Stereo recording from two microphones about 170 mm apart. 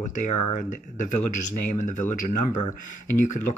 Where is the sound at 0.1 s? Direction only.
50° left (ahead or behind).